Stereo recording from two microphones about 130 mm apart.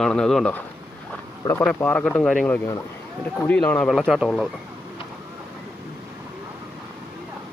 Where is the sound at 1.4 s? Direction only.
35° left (ahead or behind).